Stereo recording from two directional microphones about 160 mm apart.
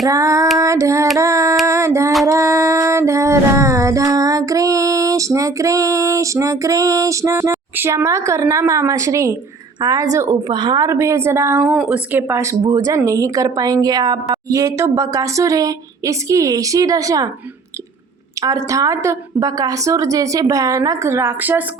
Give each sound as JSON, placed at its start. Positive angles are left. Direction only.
{"t": 0.1, "sound": "a woman's voice", "side_deg": -20}
{"t": 0.6, "sound": "child singing", "side_deg": -20}
{"t": 1.6, "sound": "a sound", "side_deg": -20}
{"t": 2.2, "sound": "music", "side_deg": -20}
{"t": 9.8, "sound": "a woman's voice", "side_deg": -20}
{"t": 18.4, "sound": "a woman's voice", "side_deg": -20}